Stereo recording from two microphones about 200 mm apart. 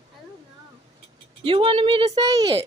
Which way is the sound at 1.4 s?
25° right (ahead or behind).